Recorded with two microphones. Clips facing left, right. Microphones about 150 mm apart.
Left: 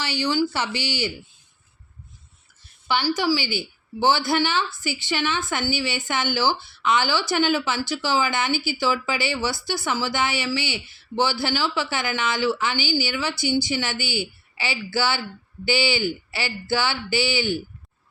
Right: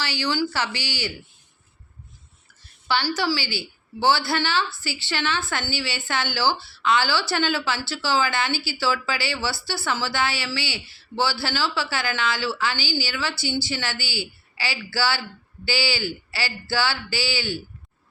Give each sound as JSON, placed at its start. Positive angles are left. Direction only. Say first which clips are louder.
{"t": 0.0, "sound": "a woman's voice", "louder": "left 2 dB", "side_deg": 20}
{"t": 2.8, "sound": "a woman's voice", "louder": "left 2 dB", "side_deg": 15}